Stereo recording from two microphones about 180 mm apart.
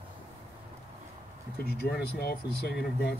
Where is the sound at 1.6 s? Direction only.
60° left (ahead or behind).